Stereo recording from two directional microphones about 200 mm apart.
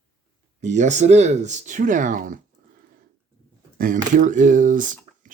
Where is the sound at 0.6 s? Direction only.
35° right (ahead or behind).